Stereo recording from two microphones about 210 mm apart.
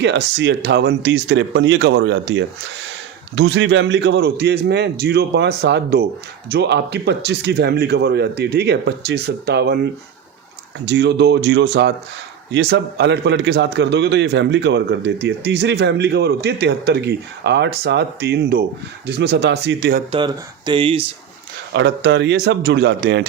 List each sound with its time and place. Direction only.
0.0 s a man's voice: 55° right (ahead or behind)
20.1 s speech: 25° right (ahead or behind)
21.7 s a man's voice: 55° right (ahead or behind)